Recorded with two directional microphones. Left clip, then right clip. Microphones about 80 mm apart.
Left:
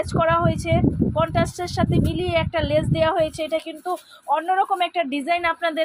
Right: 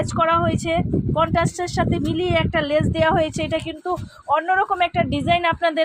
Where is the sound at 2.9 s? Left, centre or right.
Right.